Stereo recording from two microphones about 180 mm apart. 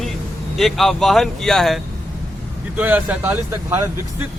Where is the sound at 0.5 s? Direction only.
Centre (ahead or behind).